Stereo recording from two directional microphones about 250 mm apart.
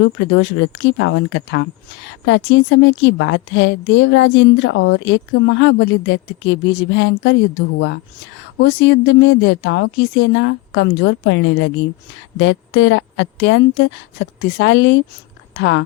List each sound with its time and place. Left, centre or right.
0.0 s a woman's voice: left